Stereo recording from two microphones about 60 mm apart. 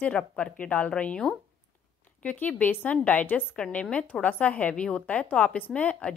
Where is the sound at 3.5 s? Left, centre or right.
Centre.